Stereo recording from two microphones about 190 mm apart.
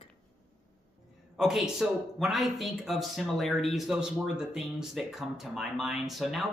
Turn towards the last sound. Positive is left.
turn(degrees=0)  # may be behind; listen again after turning